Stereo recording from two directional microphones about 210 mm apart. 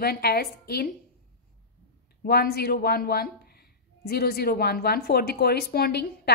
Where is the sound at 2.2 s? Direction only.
50° left (ahead or behind).